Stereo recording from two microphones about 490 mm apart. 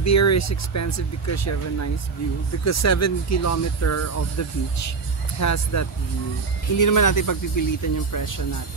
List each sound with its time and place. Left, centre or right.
0.0 s speech: left